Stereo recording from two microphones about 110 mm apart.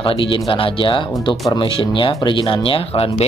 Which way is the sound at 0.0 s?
55° left (ahead or behind).